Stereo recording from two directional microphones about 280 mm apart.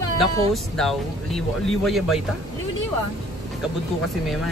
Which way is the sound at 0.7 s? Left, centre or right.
Centre.